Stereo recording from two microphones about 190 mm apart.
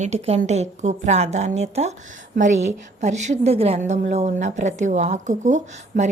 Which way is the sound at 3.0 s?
35° right (ahead or behind).